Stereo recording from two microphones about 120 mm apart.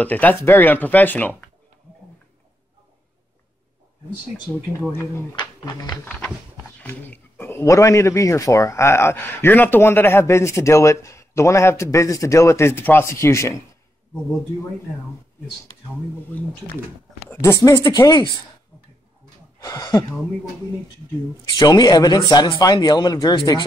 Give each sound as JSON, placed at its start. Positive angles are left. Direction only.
{"t": 0.0, "sound": "speech", "side_deg": 15}
{"t": 4.7, "sound": "speech", "side_deg": 20}
{"t": 5.3, "sound": "speech", "side_deg": 35}
{"t": 6.0, "sound": "speech", "side_deg": 10}
{"t": 17.5, "sound": "speech", "side_deg": 30}
{"t": 19.6, "sound": "speech", "side_deg": 30}
{"t": 21.5, "sound": "speech", "side_deg": 35}